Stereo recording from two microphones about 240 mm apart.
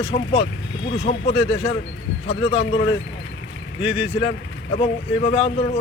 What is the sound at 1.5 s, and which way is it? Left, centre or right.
Speech, left.